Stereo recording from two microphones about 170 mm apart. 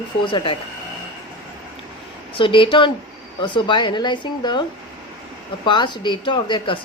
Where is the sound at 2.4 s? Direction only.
30° left (ahead or behind).